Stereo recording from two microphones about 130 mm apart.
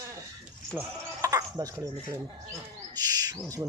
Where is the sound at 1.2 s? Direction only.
25° right (ahead or behind).